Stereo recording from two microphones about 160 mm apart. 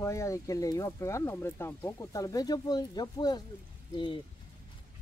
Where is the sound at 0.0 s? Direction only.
20° left (ahead or behind).